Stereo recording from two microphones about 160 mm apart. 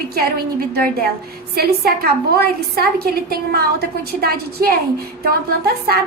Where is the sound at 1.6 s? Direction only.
75° right (ahead or behind).